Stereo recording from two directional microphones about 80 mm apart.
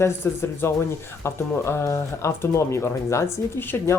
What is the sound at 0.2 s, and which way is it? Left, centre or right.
Speech, left.